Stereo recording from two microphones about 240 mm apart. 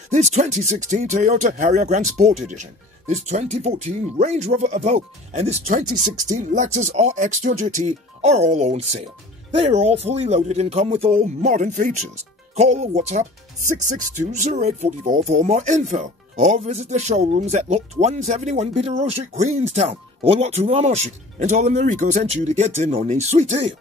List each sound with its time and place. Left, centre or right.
0.1 s speech: right